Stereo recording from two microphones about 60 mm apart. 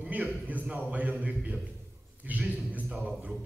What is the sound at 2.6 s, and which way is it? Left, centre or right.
Speech, right.